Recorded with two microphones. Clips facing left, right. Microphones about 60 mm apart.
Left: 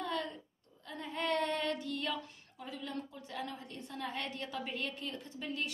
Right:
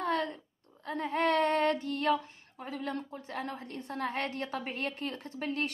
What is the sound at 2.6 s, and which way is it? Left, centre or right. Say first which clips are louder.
A woman's voice: right 5 dB; right.